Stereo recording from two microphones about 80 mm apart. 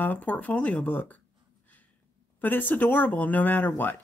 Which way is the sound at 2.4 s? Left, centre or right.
Left.